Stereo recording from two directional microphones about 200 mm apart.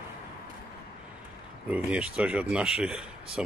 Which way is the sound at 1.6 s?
5° right (ahead or behind).